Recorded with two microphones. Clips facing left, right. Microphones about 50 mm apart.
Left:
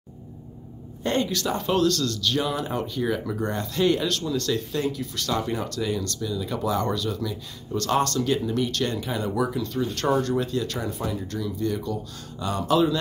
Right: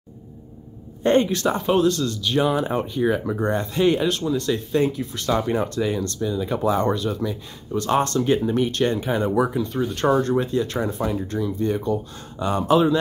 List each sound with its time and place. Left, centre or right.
1.0 s speech: right